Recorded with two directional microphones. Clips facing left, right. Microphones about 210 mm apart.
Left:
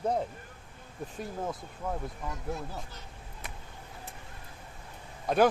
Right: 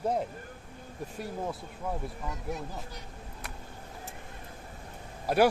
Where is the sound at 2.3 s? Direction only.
20° right (ahead or behind).